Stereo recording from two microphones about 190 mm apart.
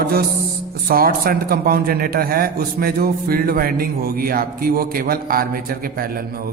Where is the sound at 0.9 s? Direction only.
50° right (ahead or behind).